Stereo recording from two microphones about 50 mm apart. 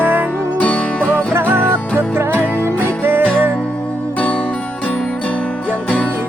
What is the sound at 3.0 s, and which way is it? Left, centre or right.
Music, right.